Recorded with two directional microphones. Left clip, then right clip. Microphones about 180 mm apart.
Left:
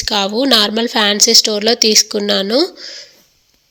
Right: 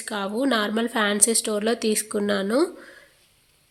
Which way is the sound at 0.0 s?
30° left (ahead or behind).